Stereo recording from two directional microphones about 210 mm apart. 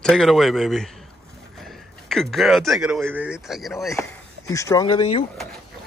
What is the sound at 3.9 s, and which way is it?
Speech, 15° left (ahead or behind).